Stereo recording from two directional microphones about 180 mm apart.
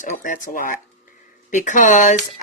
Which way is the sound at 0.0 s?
45° left (ahead or behind).